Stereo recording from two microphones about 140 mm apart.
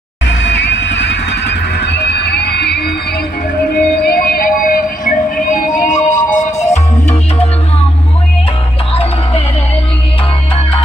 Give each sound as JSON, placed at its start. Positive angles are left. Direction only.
{"t": 3.7, "sound": "music", "side_deg": 90}